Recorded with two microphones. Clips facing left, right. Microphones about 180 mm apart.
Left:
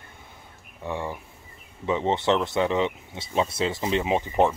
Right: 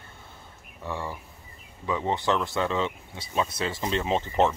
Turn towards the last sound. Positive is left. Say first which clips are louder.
# left 2 dB
turn(degrees=15)  # may be behind; listen again after turning